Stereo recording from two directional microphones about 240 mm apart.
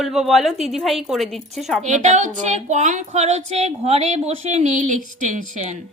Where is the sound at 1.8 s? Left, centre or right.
Right.